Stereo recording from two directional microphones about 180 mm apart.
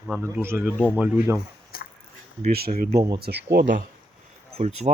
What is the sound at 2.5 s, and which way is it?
Speech, 55° right (ahead or behind).